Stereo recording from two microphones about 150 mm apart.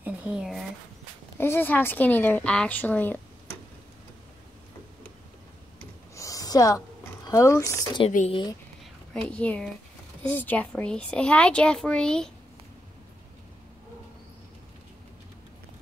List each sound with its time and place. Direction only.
0.0 s speech: 10° right (ahead or behind)
1.4 s a child's voice: 15° left (ahead or behind)
6.1 s a sound: 20° left (ahead or behind)
7.2 s speech: 20° left (ahead or behind)
8.3 s speech: 30° left (ahead or behind)
9.1 s a child's voice: 10° left (ahead or behind)